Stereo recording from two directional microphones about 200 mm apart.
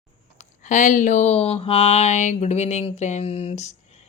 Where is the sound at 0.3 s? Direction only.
40° left (ahead or behind).